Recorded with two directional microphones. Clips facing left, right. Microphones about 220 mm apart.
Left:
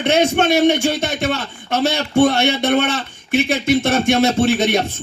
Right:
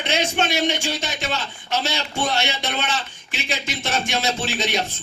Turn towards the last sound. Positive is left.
turn(degrees=55)  # may be behind; listen again after turning